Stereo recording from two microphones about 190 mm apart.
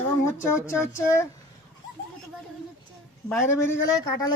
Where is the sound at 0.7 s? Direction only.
15° left (ahead or behind).